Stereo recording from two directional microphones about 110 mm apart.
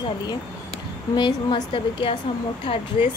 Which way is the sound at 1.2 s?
40° left (ahead or behind).